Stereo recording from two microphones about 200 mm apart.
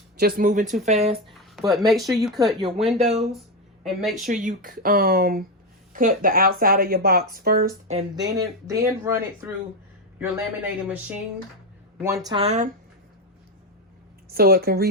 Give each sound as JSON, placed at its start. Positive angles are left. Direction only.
{"t": 0.2, "sound": "speech", "side_deg": -50}
{"t": 1.3, "sound": "a sound", "side_deg": 0}
{"t": 1.9, "sound": "speech", "side_deg": 0}
{"t": 2.6, "sound": "speech", "side_deg": -25}
{"t": 3.8, "sound": "speech", "side_deg": 0}
{"t": 4.2, "sound": "speech", "side_deg": -40}
{"t": 8.1, "sound": "speech", "side_deg": -15}
{"t": 10.2, "sound": "speech", "side_deg": -10}
{"t": 14.3, "sound": "speech", "side_deg": -50}